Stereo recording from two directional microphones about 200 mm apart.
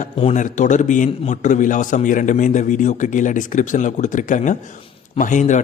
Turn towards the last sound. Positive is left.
turn(degrees=40)  # may be behind; listen again after turning